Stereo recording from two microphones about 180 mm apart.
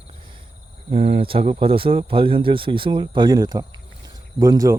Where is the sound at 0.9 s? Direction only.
35° right (ahead or behind).